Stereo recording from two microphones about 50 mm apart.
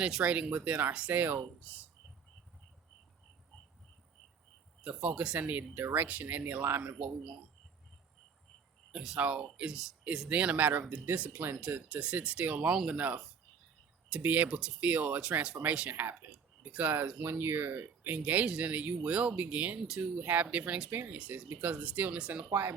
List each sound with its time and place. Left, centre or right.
0.0 s speech: centre
4.8 s speech: right
8.9 s speech: centre
10.2 s speech: right
18.2 s speech: right
22.4 s speech: right